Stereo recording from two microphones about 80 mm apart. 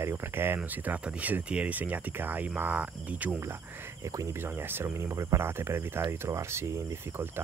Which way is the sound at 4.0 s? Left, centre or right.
Right.